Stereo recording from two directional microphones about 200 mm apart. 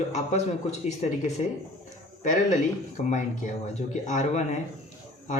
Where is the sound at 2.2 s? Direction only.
40° left (ahead or behind).